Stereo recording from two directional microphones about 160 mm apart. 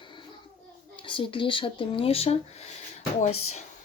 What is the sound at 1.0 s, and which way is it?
Speech, 30° left (ahead or behind).